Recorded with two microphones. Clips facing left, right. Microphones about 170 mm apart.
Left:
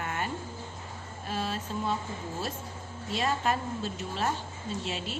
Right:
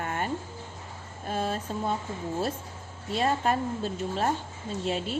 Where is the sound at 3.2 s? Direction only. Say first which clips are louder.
Right 3 dB; 35° right (ahead or behind).